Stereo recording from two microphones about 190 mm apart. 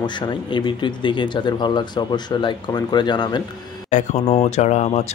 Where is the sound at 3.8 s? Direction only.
40° left (ahead or behind).